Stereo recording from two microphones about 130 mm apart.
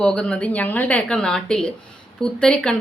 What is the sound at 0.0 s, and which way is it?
Speech, 5° left (ahead or behind).